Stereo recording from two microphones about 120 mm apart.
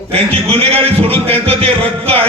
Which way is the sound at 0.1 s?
55° right (ahead or behind).